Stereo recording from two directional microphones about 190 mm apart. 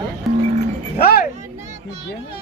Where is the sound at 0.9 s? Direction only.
55° left (ahead or behind).